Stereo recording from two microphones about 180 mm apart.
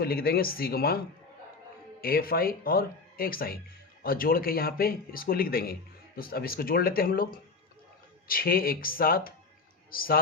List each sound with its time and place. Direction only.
0.0 s speech: 60° left (ahead or behind)